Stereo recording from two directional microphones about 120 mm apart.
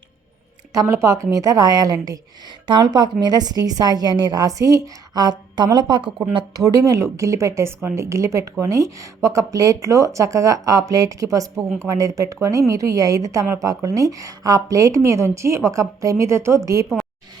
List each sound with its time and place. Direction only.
0.7 s a woman's voice: 25° right (ahead or behind)